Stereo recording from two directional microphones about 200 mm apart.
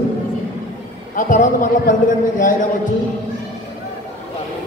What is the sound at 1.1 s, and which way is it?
A man's voice, 40° left (ahead or behind).